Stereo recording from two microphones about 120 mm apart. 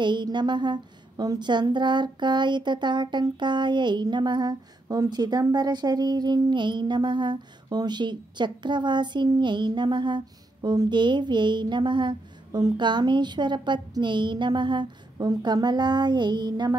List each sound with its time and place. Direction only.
0.0 s a woman's voice: 40° right (ahead or behind)